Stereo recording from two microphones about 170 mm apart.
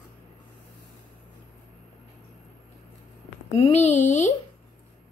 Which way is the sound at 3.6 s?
40° left (ahead or behind).